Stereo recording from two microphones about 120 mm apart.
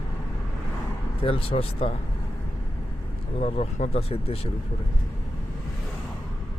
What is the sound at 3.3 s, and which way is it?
Speech, 60° left (ahead or behind).